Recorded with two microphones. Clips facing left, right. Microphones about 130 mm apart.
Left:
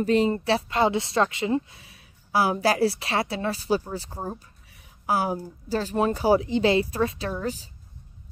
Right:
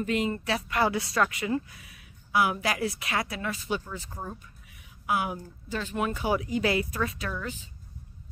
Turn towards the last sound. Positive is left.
turn(degrees=35)  # may be behind; listen again after turning